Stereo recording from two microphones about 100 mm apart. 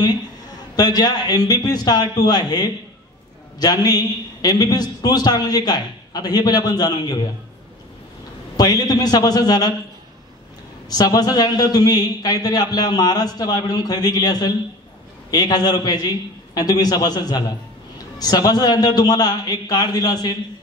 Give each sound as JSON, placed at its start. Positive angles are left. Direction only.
{"t": 0.7, "sound": "a man's voice", "side_deg": 40}
{"t": 8.5, "sound": "a man's voice", "side_deg": 40}
{"t": 10.9, "sound": "a man's voice", "side_deg": 40}